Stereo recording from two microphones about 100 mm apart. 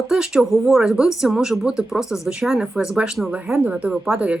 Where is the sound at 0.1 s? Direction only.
5° right (ahead or behind).